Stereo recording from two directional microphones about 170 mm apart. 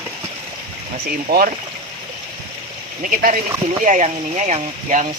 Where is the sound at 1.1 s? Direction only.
55° right (ahead or behind).